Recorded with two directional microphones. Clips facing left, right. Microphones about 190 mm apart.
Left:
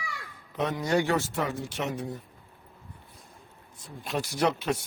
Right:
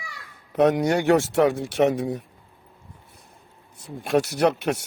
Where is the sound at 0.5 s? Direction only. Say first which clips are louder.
Right 7 dB; 70° right (ahead or behind).